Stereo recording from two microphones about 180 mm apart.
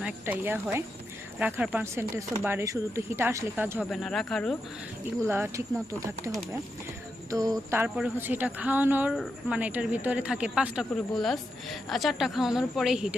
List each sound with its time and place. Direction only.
0.0 s speech: 10° right (ahead or behind)
3.8 s speech: centre (ahead or behind)
5.2 s speech: 15° right (ahead or behind)
7.3 s music: 20° right (ahead or behind)
7.9 s speech: 5° right (ahead or behind)